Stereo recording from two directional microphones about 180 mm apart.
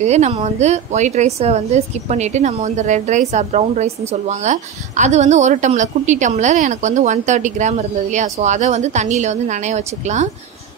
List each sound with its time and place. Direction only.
0.0 s a woman's voice: 40° right (ahead or behind)